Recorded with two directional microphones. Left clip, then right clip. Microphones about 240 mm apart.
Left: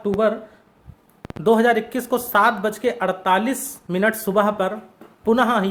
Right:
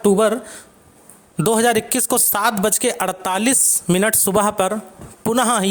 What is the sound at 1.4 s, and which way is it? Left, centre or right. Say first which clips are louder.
Speech: even; right.